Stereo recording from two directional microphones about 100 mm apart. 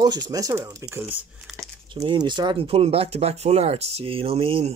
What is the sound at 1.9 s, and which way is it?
Speech, 55° right (ahead or behind).